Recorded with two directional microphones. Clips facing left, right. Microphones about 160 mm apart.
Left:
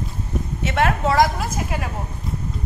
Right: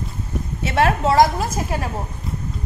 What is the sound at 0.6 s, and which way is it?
Speech, 35° right (ahead or behind).